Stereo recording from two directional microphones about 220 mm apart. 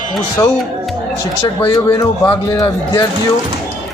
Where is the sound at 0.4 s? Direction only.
10° left (ahead or behind).